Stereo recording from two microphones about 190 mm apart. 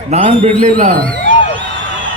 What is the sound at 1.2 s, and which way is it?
Music, 40° left (ahead or behind).